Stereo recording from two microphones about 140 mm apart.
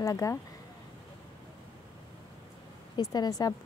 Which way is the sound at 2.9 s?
25° left (ahead or behind).